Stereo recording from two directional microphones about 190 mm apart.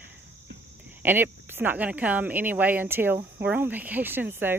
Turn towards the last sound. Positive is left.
turn(degrees=-10)  # may be behind; listen again after turning